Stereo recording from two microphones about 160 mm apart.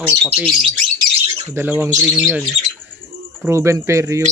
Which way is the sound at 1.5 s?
10° right (ahead or behind).